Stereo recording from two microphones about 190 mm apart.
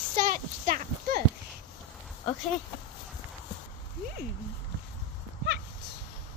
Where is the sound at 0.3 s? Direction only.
45° right (ahead or behind).